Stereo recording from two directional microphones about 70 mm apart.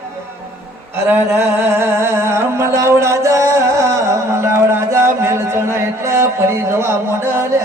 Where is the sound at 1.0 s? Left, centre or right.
Right.